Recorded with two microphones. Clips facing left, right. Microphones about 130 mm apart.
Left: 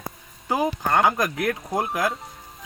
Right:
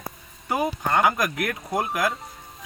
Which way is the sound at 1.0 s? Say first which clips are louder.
Even; 25° left (ahead or behind).